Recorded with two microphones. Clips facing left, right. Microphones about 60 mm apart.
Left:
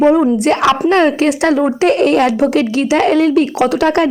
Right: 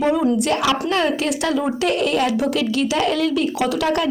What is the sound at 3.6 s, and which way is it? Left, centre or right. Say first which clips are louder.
Speech: left 7 dB; left.